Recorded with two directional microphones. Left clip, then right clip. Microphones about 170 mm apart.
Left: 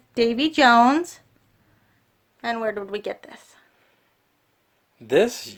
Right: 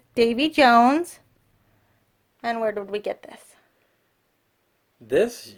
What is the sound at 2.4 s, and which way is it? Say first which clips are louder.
A woman's voice: right 1 dB; 25° right (ahead or behind).